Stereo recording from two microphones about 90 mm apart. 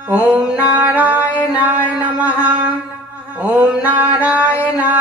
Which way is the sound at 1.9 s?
15° right (ahead or behind).